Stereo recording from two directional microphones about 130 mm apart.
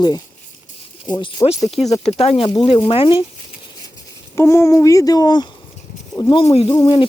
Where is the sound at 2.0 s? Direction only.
50° left (ahead or behind).